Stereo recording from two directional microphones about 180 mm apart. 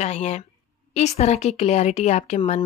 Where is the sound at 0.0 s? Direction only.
40° left (ahead or behind).